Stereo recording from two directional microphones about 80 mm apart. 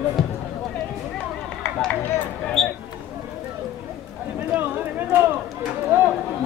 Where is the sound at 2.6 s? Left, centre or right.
Centre.